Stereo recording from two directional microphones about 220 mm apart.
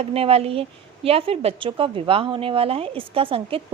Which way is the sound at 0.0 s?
25° right (ahead or behind).